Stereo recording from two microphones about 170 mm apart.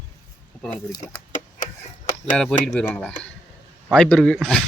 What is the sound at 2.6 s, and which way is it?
Speech, 5° left (ahead or behind).